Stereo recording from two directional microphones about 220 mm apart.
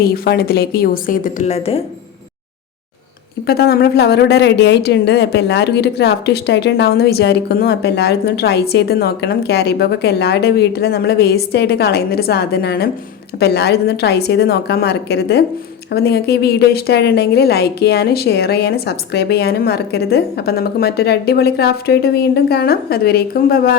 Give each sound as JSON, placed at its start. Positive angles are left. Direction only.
{"t": 0.0, "sound": "a woman's voice", "side_deg": 45}
{"t": 3.4, "sound": "a woman's voice", "side_deg": 45}